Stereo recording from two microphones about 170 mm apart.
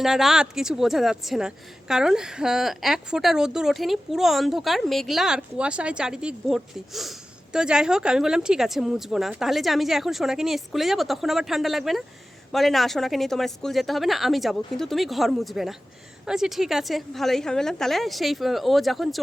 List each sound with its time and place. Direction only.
0.0 s a woman's voice: centre (ahead or behind)